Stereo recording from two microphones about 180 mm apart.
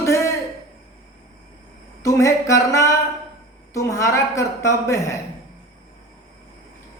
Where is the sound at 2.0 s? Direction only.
15° left (ahead or behind).